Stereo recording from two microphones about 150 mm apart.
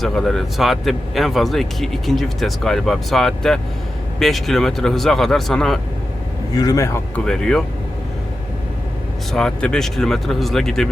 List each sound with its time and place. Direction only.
0.0 s speech: 5° left (ahead or behind)
6.6 s a man's voice: 20° left (ahead or behind)
7.3 s speech: 5° left (ahead or behind)
9.3 s speech: 5° left (ahead or behind)